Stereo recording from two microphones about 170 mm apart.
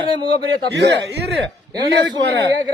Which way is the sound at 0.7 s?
85° right.